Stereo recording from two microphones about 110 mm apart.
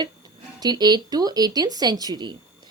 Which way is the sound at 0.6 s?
40° right (ahead or behind).